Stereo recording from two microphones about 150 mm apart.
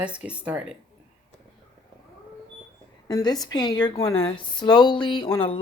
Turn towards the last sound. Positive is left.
turn(degrees=35)  # may be behind; listen again after turning